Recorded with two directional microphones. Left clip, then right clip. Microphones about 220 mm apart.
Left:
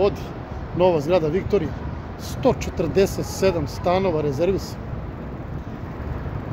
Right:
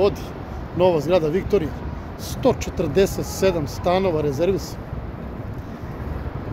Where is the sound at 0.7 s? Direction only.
Centre (ahead or behind).